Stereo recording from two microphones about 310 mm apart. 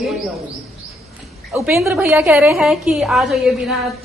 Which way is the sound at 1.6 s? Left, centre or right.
Centre.